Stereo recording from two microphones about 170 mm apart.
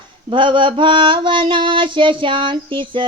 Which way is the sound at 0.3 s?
30° right (ahead or behind).